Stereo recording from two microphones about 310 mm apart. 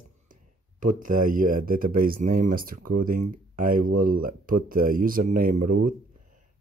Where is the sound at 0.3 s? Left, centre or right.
Right.